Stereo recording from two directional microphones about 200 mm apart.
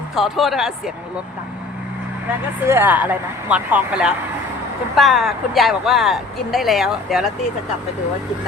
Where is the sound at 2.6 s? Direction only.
10° right (ahead or behind).